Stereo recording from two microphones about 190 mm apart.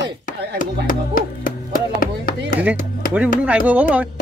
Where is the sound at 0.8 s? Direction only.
45° left (ahead or behind).